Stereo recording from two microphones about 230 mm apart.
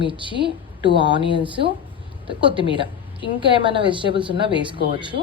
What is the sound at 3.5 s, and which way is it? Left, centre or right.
Speech, right.